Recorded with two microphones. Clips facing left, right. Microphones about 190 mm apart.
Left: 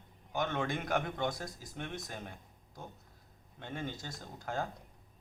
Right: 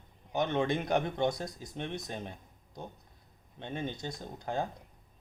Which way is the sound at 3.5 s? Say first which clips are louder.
Right 3 dB; 20° right (ahead or behind).